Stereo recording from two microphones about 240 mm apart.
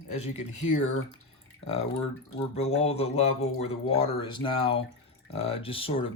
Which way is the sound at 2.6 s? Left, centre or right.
Left.